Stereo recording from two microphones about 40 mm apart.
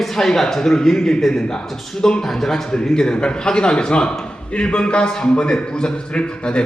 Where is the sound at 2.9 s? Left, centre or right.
Left.